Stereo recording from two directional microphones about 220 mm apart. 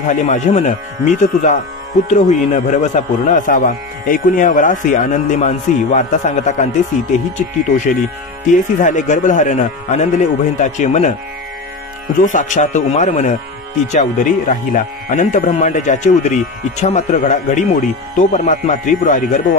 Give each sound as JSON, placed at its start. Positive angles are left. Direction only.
{"t": 0.0, "sound": "speech", "side_deg": 35}
{"t": 8.7, "sound": "speech", "side_deg": 35}
{"t": 12.2, "sound": "speech", "side_deg": 35}